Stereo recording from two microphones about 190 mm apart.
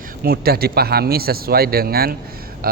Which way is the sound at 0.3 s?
55° right (ahead or behind).